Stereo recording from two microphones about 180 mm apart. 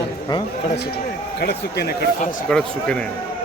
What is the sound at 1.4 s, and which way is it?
Speech, 65° left (ahead or behind).